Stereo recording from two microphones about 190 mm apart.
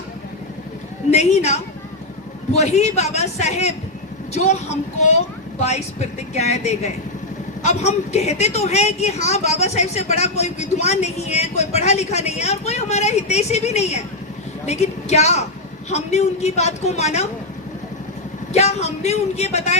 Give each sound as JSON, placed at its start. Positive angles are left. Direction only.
{"t": 1.1, "sound": "a woman's voice", "side_deg": 35}
{"t": 18.5, "sound": "a woman's voice", "side_deg": 35}